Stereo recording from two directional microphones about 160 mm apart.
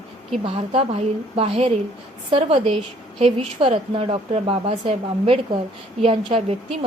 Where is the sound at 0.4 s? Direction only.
35° right (ahead or behind).